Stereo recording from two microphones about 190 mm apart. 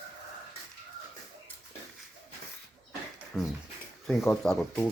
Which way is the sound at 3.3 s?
Centre (ahead or behind).